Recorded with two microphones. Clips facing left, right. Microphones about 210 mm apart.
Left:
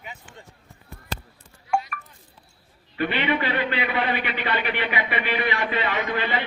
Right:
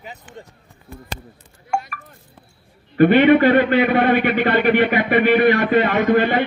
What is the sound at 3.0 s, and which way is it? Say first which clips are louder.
A man's voice: right 13 dB; 50° right (ahead or behind).